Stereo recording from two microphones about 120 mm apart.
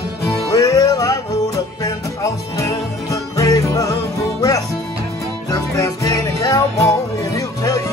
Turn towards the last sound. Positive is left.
turn(degrees=30)  # may be behind; listen again after turning